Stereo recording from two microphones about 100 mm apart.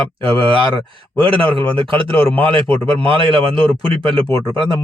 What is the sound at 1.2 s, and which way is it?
A man's voice, 60° right (ahead or behind).